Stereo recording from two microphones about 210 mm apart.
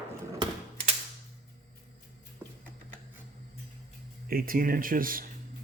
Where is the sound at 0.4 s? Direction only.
20° right (ahead or behind).